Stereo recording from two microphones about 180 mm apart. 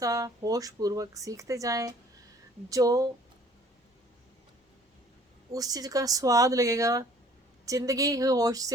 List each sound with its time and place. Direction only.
0.0 s speech: 20° right (ahead or behind)
5.5 s speech: 20° right (ahead or behind)